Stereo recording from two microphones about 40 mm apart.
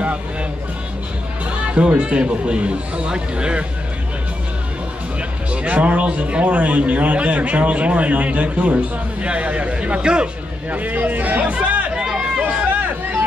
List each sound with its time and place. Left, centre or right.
1.4 s speech: right
5.5 s a man's voice: right
10.7 s speech: right
11.4 s chatter: right
12.0 s run: right
12.4 s a sound: right